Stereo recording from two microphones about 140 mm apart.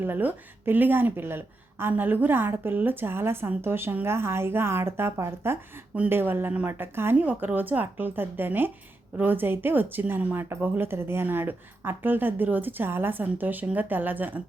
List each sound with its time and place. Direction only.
0.0 s a woman's voice: 15° right (ahead or behind)